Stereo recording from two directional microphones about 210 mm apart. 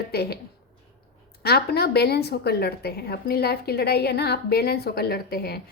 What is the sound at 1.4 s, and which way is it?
A woman's voice, 50° left (ahead or behind).